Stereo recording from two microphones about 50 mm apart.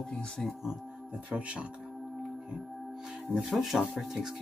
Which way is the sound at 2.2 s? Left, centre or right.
Centre.